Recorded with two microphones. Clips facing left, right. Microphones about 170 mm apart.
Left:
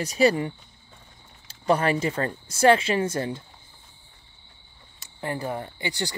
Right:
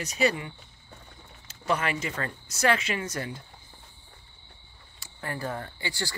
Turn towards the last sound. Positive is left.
turn(degrees=20)  # may be behind; listen again after turning